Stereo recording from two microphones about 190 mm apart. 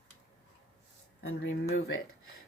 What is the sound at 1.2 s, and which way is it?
Speech, 80° left.